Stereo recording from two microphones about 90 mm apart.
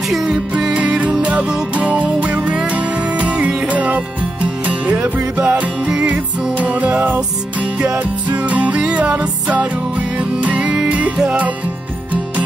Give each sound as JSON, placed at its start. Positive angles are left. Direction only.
{"t": 0.1, "sound": "music", "side_deg": -5}